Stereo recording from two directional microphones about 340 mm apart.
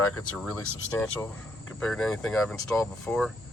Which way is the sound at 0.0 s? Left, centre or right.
Centre.